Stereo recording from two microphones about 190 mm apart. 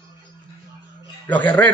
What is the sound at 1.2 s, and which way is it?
Speech, 10° left (ahead or behind).